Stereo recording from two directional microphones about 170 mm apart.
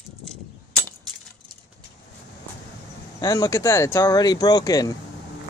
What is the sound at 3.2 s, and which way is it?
Speech, 20° left (ahead or behind).